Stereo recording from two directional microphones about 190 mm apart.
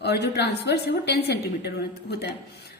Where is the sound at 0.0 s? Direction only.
60° left (ahead or behind).